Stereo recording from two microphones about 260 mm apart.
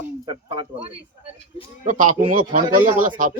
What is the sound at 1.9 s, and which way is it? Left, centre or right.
Speech, right.